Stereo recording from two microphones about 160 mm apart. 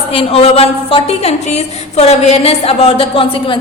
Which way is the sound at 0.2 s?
35° left (ahead or behind).